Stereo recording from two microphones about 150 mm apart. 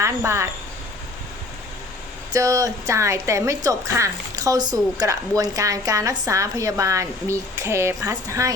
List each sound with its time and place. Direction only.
0.0 s speech: 20° right (ahead or behind)
2.3 s speech: 20° right (ahead or behind)